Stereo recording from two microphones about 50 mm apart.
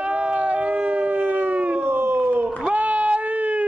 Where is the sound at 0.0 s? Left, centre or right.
Right.